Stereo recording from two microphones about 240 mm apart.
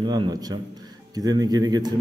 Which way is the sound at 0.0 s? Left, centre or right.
Centre.